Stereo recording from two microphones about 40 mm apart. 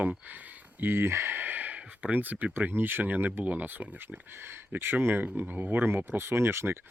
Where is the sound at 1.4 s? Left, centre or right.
Right.